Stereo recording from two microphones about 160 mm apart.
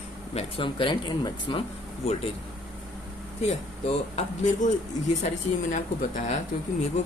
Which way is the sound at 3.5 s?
45° left (ahead or behind).